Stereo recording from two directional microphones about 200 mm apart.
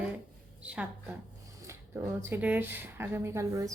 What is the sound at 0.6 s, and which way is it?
A woman's voice, 5° right (ahead or behind).